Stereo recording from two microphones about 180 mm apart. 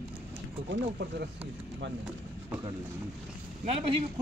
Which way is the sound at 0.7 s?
65° right (ahead or behind).